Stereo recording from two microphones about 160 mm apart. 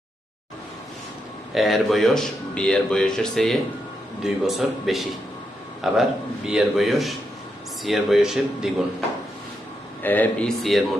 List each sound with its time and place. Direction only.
1.5 s speech: centre (ahead or behind)
10.0 s speech: 10° left (ahead or behind)
10.6 s speech: centre (ahead or behind)